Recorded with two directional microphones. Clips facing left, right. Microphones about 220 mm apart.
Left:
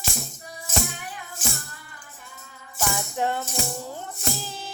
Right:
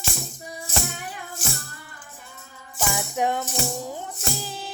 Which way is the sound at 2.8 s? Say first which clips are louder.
Right 1 dB; 15° right (ahead or behind).